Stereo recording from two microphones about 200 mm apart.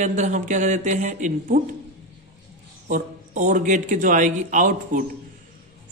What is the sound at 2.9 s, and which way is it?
A man's voice, 40° right (ahead or behind).